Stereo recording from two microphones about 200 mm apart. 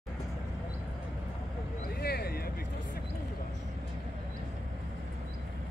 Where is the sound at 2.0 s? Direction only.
50° left (ahead or behind).